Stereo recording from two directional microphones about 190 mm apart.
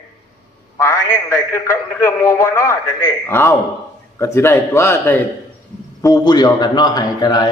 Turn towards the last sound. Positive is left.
turn(degrees=20)  # may be behind; listen again after turning